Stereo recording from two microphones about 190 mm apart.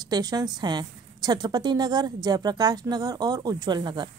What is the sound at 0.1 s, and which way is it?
Speech, 20° right (ahead or behind).